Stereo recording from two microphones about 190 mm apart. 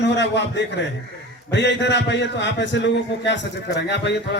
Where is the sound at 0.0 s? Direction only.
65° left (ahead or behind).